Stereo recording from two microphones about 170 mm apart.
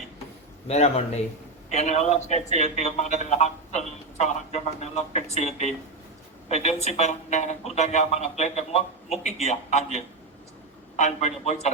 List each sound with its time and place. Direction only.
0.7 s a man's voice: 40° left (ahead or behind)